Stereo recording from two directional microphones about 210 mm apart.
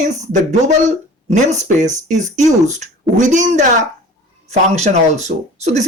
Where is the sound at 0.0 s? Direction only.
35° right (ahead or behind).